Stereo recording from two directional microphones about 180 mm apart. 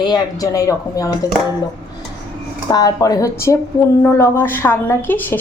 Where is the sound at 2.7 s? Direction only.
20° left (ahead or behind).